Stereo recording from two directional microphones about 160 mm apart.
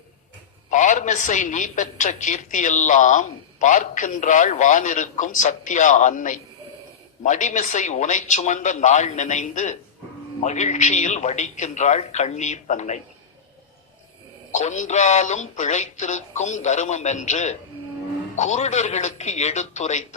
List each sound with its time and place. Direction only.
0.7 s a man's voice: 50° left (ahead or behind)
14.5 s a man's voice: 50° left (ahead or behind)